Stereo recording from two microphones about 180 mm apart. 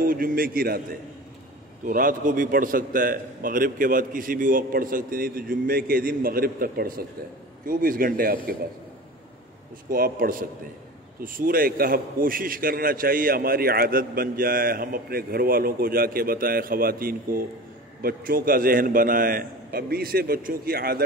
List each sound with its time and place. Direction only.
0.0 s a man's voice: 50° right (ahead or behind)
1.9 s a man's voice: 50° right (ahead or behind)
9.8 s a man's voice: 50° right (ahead or behind)